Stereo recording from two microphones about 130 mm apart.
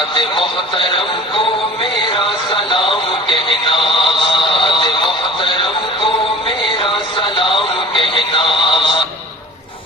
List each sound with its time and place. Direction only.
0.1 s speech: 40° left (ahead or behind)
1.8 s music: 40° left (ahead or behind)
7.2 s music: 40° left (ahead or behind)